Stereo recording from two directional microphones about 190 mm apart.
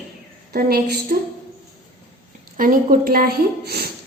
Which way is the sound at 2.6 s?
45° right (ahead or behind).